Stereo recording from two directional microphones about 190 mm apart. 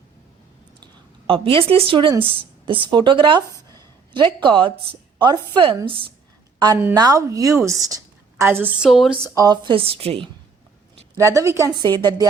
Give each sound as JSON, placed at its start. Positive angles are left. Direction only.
{"t": 1.3, "sound": "a woman's voice", "side_deg": -30}
{"t": 9.3, "sound": "a woman's voice", "side_deg": -20}
{"t": 11.2, "sound": "a woman's voice", "side_deg": -15}